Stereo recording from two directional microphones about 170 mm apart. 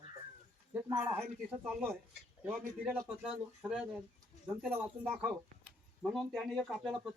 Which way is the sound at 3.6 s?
5° right (ahead or behind).